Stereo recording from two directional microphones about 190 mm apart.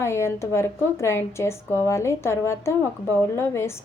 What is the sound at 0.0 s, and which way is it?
Speech, 15° left (ahead or behind).